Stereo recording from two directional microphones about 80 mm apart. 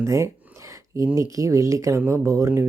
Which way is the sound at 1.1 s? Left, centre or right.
Right.